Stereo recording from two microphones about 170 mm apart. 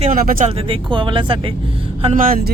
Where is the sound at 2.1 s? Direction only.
50° right (ahead or behind).